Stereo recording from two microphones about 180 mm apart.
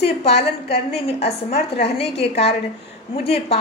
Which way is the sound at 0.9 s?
35° left (ahead or behind).